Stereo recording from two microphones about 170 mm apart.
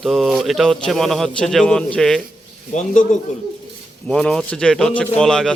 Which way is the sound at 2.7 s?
45° left (ahead or behind).